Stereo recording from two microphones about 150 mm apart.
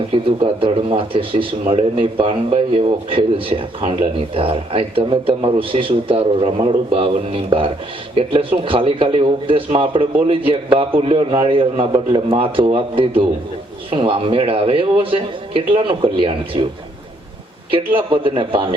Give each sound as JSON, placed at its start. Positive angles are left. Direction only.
{"t": 0.1, "sound": "a man's voice", "side_deg": -35}
{"t": 17.7, "sound": "a man's voice", "side_deg": -35}